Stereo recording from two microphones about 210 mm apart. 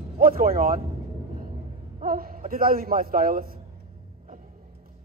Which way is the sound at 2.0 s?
45° right (ahead or behind).